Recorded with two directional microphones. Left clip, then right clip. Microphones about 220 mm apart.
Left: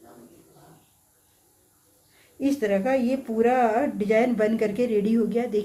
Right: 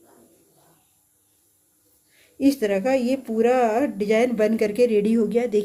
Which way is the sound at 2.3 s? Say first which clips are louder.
Right 3 dB; 45° right (ahead or behind).